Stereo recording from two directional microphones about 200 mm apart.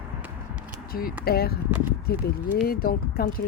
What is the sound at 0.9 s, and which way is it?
Speech, 45° left (ahead or behind).